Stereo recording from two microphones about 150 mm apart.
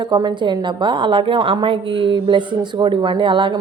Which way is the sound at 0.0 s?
30° right (ahead or behind).